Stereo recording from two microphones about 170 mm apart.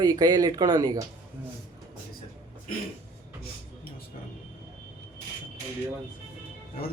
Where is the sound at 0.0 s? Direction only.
20° right (ahead or behind).